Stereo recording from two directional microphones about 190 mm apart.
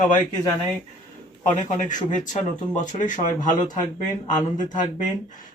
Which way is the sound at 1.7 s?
40° left (ahead or behind).